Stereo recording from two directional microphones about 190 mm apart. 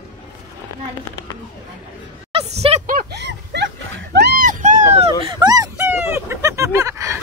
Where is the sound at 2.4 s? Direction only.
35° right (ahead or behind).